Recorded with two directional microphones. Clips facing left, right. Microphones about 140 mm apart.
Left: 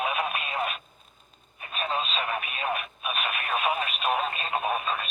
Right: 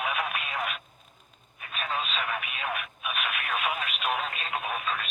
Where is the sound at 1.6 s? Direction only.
30° left (ahead or behind).